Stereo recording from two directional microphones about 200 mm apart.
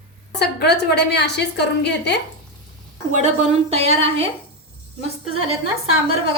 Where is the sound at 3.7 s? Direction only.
30° right (ahead or behind).